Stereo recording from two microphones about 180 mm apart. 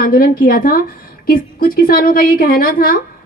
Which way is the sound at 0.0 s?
55° left (ahead or behind).